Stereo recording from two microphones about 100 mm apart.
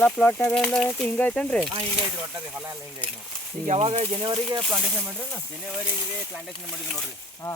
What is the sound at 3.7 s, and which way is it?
Speech, 85° right.